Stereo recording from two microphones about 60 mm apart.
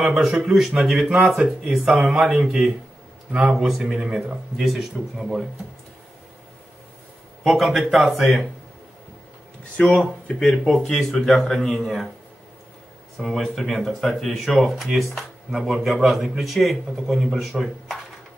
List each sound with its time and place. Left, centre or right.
0.0 s a man's voice: centre
3.3 s speech: centre
3.5 s speech: centre
7.4 s speech: centre
9.8 s speech: left
10.5 s speech: centre
10.8 s speech: centre
13.4 s speech: centre